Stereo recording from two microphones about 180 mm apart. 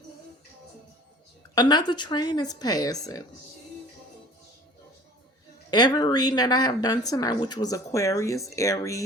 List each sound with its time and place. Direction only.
1.5 s speech: 25° left (ahead or behind)
5.7 s speech: 20° left (ahead or behind)